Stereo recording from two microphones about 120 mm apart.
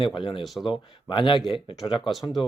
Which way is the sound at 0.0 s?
45° left (ahead or behind).